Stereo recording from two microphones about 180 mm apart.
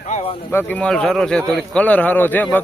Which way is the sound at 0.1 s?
35° left (ahead or behind).